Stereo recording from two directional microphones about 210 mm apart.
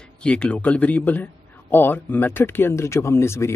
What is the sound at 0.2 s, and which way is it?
Speech, 5° left (ahead or behind).